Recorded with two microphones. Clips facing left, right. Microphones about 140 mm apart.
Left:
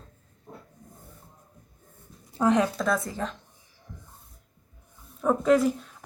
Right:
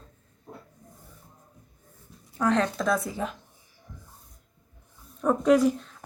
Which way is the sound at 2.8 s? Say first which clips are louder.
Right 1 dB; centre (ahead or behind).